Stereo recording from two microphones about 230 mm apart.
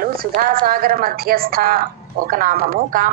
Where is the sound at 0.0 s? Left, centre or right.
Right.